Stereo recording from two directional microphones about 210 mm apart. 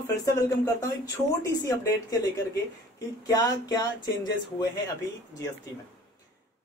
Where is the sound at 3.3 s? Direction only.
15° left (ahead or behind).